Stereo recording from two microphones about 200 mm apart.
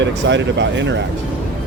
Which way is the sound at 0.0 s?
65° right (ahead or behind).